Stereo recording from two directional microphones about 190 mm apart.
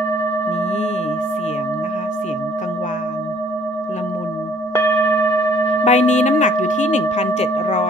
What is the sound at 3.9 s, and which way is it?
Singing bowl, 40° left (ahead or behind).